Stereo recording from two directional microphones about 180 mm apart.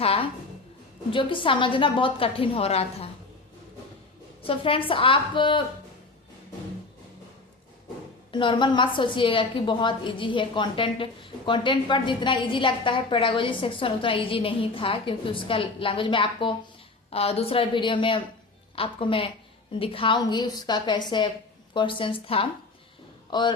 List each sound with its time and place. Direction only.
0.0 s a sound: 35° left (ahead or behind)
1.1 s a woman's voice: 30° left (ahead or behind)
4.4 s a woman's voice: 30° left (ahead or behind)
8.3 s a woman's voice: 25° left (ahead or behind)